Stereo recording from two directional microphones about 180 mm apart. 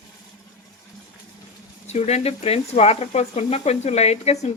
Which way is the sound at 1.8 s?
40° left (ahead or behind).